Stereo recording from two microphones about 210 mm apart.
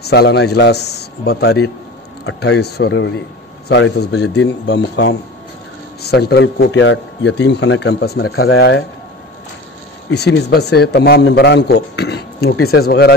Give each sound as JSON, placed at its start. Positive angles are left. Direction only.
{"t": 0.0, "sound": "a man's voice", "side_deg": 50}
{"t": 10.1, "sound": "a man's voice", "side_deg": 50}